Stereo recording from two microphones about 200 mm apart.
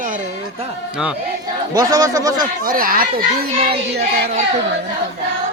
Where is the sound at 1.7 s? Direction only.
15° right (ahead or behind).